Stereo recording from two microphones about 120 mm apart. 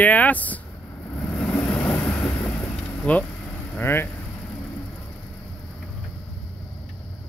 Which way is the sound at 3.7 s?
20° left (ahead or behind).